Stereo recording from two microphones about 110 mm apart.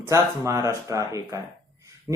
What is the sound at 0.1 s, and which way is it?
Speech, 30° right (ahead or behind).